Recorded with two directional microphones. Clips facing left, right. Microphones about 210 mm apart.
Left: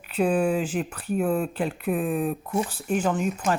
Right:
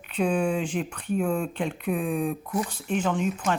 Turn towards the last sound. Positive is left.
turn(degrees=5)  # may be behind; listen again after turning